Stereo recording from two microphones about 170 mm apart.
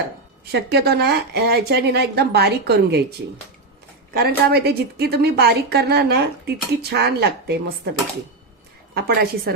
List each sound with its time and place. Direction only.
0.5 s a woman's voice: 75° right (ahead or behind)
4.1 s a woman's voice: 65° right (ahead or behind)
9.0 s a woman's voice: 65° right (ahead or behind)